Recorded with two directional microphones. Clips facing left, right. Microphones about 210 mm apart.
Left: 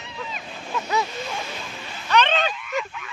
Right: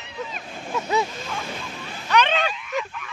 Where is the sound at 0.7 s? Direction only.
25° right (ahead or behind).